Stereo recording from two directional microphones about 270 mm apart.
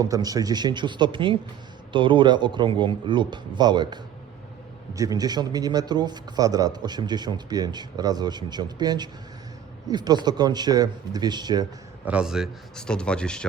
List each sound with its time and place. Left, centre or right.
0.0 s a man's voice: centre
12.0 s speech: centre